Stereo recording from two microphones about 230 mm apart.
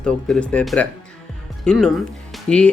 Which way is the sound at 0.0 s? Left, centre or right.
Centre.